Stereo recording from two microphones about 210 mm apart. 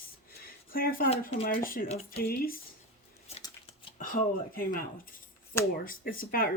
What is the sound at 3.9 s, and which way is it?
Speech, 40° left (ahead or behind).